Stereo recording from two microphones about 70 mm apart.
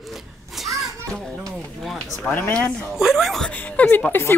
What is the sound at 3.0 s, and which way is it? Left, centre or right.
Speech, centre.